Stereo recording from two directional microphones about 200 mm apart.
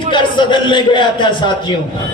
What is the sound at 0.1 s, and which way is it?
Speech, 25° left (ahead or behind).